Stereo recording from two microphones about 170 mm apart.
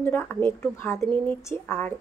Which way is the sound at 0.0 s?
10° left (ahead or behind).